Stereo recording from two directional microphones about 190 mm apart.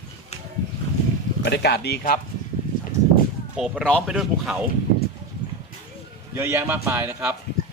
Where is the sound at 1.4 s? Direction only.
60° left (ahead or behind).